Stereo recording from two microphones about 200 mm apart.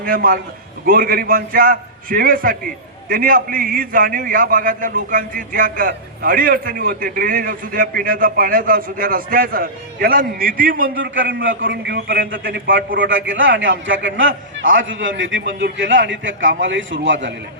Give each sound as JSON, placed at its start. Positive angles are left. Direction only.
{"t": 0.0, "sound": "a man's voice", "side_deg": -45}
{"t": 11.0, "sound": "a man's voice", "side_deg": -70}
{"t": 13.0, "sound": "a man's voice", "side_deg": -70}